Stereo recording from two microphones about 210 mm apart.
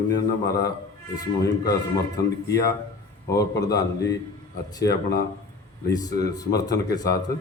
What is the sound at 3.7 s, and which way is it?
Speech, 15° left (ahead or behind).